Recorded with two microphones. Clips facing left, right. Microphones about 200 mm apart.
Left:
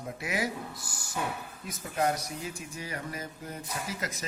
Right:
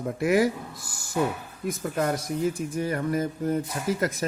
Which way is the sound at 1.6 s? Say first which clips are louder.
Right 4 dB; 45° right (ahead or behind).